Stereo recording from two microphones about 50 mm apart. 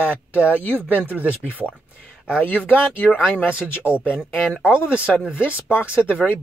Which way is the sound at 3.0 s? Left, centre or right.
Left.